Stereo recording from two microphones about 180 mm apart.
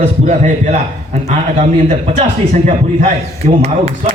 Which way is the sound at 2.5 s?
45° right (ahead or behind).